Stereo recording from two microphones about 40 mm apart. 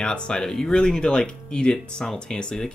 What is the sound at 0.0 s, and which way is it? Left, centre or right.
Speech, left.